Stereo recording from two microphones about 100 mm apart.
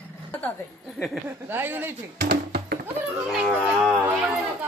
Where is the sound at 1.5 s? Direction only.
20° right (ahead or behind).